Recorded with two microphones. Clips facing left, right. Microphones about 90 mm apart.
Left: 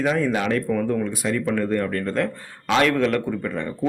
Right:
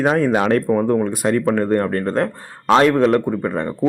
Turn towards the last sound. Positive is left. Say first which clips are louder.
# right 5 dB
turn(degrees=-40)  # may be behind; listen again after turning